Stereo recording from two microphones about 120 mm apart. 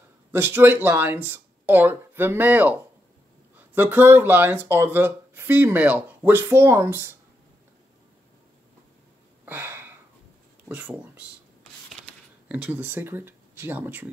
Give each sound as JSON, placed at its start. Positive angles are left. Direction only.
{"t": 0.3, "sound": "speech", "side_deg": -20}
{"t": 9.5, "sound": "sniff", "side_deg": -20}
{"t": 10.7, "sound": "speech", "side_deg": -10}
{"t": 12.4, "sound": "speech", "side_deg": -10}